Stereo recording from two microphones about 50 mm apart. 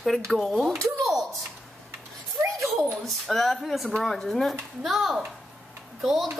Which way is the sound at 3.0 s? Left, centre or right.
Centre.